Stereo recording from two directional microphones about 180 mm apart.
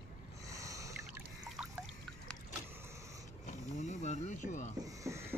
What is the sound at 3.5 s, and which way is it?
Wild animals, 40° left (ahead or behind).